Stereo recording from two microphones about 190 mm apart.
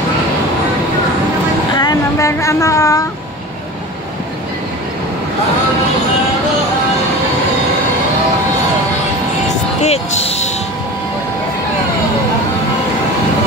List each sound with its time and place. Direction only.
1.8 s vehicle: 20° left (ahead or behind)
9.8 s music: 35° left (ahead or behind)